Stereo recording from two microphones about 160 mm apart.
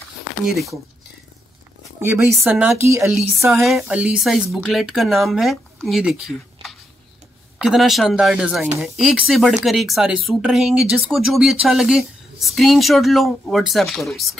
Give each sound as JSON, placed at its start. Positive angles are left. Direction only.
{"t": 2.0, "sound": "speech", "side_deg": -10}
{"t": 3.4, "sound": "speech", "side_deg": 0}